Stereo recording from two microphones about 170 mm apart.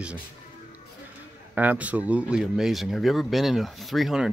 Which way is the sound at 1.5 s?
10° right (ahead or behind).